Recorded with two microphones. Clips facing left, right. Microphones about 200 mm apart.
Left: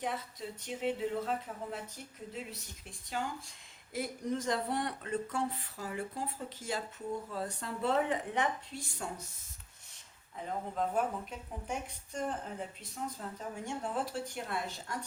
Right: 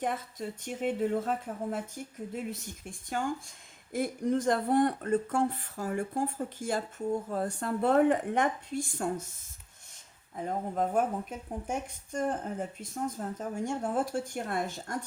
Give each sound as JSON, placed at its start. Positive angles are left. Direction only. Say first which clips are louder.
{"t": 0.0, "sound": "speech", "louder": "right 5 dB", "side_deg": -50}
{"t": 10.3, "sound": "speech", "louder": "right 5 dB", "side_deg": -50}